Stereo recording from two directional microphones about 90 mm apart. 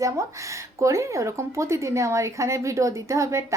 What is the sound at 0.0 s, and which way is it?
Speech, 35° right (ahead or behind).